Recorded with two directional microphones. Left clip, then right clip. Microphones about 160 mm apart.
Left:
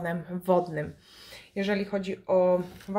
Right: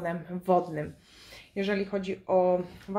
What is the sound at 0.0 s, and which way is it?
Speech, 15° left (ahead or behind).